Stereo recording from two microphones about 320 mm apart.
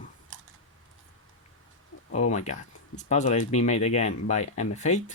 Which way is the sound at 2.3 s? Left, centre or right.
Left.